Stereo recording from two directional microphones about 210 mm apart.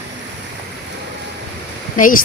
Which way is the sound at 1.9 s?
40° left (ahead or behind).